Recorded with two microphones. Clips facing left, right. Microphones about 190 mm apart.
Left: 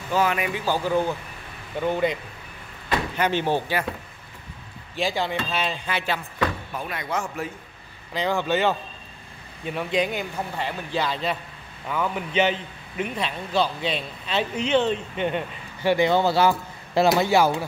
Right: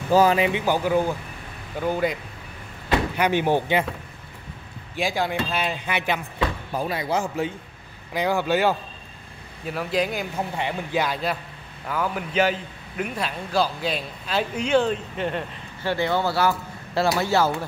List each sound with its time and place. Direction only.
0.1 s a man's voice: 35° right (ahead or behind)
0.5 s a man's voice: 15° right (ahead or behind)
3.2 s speech: 15° right (ahead or behind)
4.9 s speech: 10° right (ahead or behind)
6.7 s a man's voice: 35° right (ahead or behind)
8.1 s a man's voice: 10° right (ahead or behind)
10.5 s a man's voice: 15° right (ahead or behind); by 15.4 s centre (ahead or behind)
15.8 s a man's voice: 15° left (ahead or behind)